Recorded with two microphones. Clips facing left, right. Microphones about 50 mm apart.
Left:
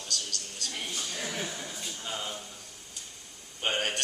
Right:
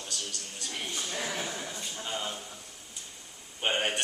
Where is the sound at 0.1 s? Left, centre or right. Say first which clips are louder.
Left 4 dB; centre.